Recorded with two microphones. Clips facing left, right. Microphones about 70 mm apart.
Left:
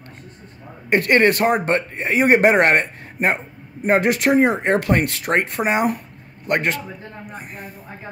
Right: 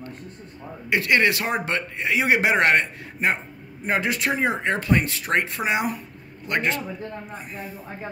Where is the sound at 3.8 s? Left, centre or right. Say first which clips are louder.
Left 7 dB; left.